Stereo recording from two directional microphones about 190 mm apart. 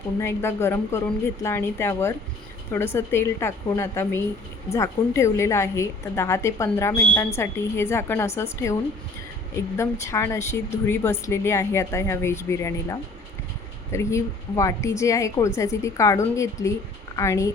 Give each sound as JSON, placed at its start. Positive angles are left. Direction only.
{"t": 0.2, "sound": "speech", "side_deg": 15}